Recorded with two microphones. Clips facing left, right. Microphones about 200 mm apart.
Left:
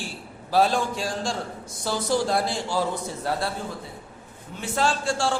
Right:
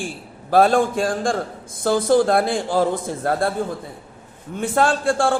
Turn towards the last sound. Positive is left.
turn(degrees=-55)  # may be behind; listen again after turning